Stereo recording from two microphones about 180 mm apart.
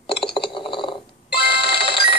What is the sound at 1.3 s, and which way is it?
Music, 65° left (ahead or behind).